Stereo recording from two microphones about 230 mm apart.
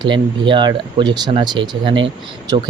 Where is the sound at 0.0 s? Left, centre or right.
Right.